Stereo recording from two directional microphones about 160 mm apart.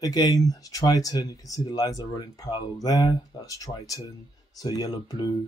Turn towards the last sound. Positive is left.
turn(degrees=25)  # may be behind; listen again after turning